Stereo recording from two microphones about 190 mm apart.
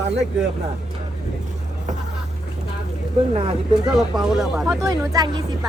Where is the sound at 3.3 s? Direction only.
30° right (ahead or behind).